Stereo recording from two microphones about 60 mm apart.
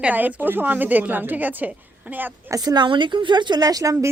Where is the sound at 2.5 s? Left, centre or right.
Right.